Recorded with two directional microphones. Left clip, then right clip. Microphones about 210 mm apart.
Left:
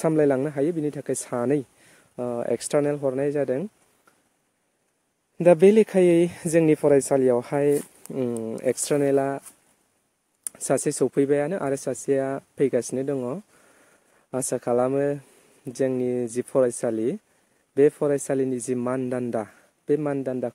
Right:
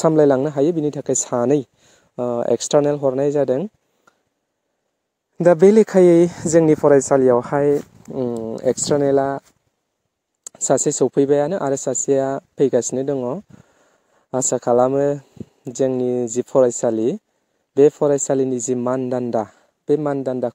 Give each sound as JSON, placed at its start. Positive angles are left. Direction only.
{"t": 0.0, "sound": "speech", "side_deg": -25}
{"t": 5.4, "sound": "speech", "side_deg": -25}
{"t": 10.4, "sound": "speech", "side_deg": -20}